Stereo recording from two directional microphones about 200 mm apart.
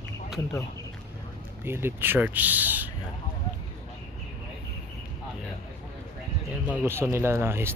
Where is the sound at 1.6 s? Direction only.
10° right (ahead or behind).